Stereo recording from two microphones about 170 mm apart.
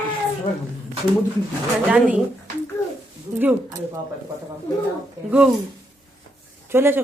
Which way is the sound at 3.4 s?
10° right (ahead or behind).